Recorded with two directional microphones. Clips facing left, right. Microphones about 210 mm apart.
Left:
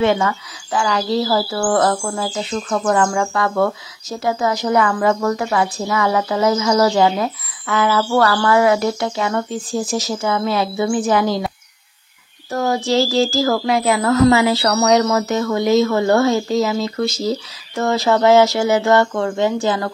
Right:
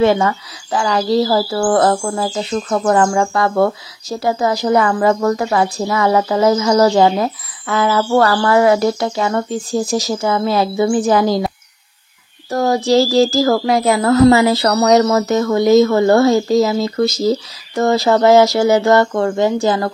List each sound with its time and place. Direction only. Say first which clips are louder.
0.0 s a woman's voice: right 3 dB; 35° right (ahead or behind)